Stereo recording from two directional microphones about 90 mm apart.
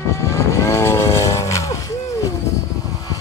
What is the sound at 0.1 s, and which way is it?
Vehicle, 35° left (ahead or behind).